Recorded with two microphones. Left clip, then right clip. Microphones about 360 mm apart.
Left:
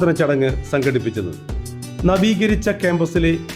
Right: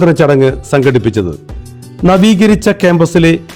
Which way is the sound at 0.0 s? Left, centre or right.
Right.